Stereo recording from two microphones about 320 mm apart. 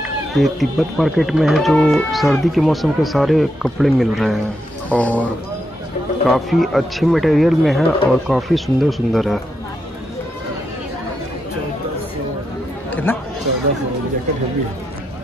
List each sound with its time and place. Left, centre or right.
0.4 s speech: centre
6.2 s speech: centre
12.9 s chatter: centre